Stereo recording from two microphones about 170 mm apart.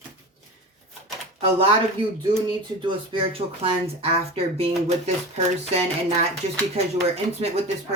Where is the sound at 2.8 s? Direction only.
30° right (ahead or behind).